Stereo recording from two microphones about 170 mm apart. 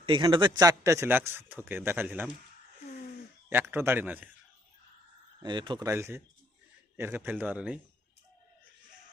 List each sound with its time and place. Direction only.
0.0 s a man's voice: 30° right (ahead or behind); by 2.3 s 10° right (ahead or behind)
3.5 s a man's voice: 15° right (ahead or behind)
5.4 s speech: 25° right (ahead or behind)
5.9 s a man's voice: 15° right (ahead or behind)